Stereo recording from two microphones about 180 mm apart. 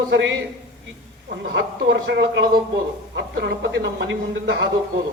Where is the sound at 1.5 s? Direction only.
75° right (ahead or behind).